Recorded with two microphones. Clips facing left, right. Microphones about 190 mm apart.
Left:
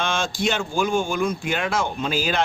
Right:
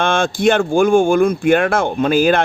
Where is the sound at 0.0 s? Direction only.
55° right (ahead or behind).